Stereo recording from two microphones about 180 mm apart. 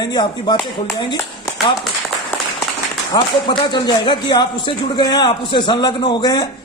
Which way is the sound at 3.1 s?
25° left (ahead or behind).